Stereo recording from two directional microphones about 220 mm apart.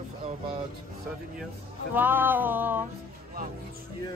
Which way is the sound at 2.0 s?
10° right (ahead or behind).